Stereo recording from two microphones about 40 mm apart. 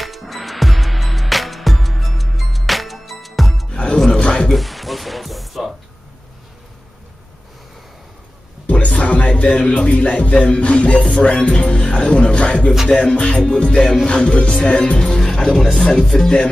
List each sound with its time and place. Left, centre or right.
0.0 s music: centre
3.7 s music: left
4.5 s music: centre
8.6 s speech: left
11.2 s music: left
11.5 s speech: left; by 16.3 s centre